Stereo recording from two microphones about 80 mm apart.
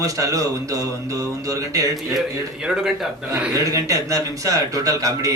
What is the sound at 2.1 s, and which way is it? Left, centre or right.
Speech, centre.